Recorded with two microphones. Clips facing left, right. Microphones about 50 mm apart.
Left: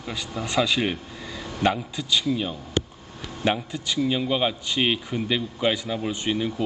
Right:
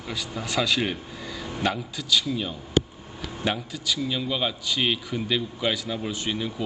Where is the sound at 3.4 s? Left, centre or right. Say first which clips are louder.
Left 4 dB; left.